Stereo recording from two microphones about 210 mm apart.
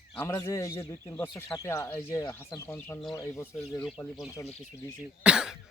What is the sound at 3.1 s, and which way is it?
Speech, 15° left (ahead or behind).